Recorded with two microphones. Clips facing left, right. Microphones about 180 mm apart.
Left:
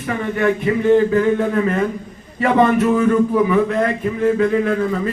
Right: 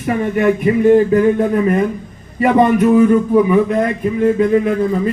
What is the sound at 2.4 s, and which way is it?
Speech, 15° right (ahead or behind).